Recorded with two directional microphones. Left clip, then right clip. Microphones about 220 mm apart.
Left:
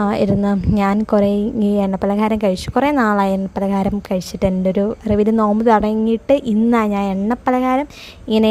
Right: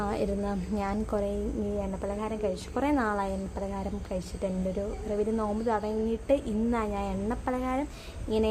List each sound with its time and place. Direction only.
0.0 s a woman's voice: 40° left (ahead or behind)